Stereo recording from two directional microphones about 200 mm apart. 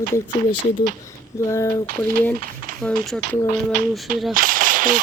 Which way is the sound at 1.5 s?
15° left (ahead or behind).